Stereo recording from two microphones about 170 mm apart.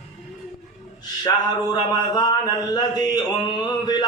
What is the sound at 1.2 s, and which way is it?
A man's voice, 25° left (ahead or behind).